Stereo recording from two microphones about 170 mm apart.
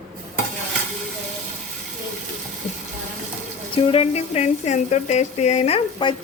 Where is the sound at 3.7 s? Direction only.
35° left (ahead or behind).